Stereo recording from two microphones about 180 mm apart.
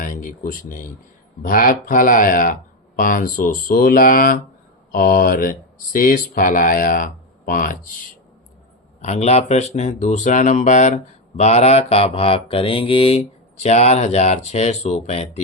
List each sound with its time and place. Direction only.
0.0 s speech: 45° left (ahead or behind)
9.0 s speech: 40° left (ahead or behind)